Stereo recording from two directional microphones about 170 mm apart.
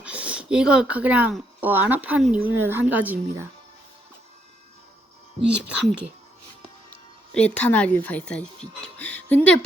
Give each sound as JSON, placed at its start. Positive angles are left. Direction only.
{"t": 0.0, "sound": "speech", "side_deg": -5}
{"t": 5.4, "sound": "speech", "side_deg": -5}
{"t": 7.3, "sound": "speech", "side_deg": 10}
{"t": 9.0, "sound": "music", "side_deg": 10}